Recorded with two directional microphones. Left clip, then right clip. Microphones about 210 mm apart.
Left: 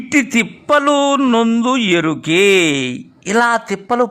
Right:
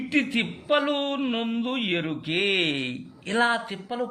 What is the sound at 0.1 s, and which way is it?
A man's voice, 30° left (ahead or behind).